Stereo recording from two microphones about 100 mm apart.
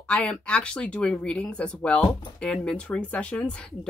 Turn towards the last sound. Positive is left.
turn(degrees=10)  # may be behind; listen again after turning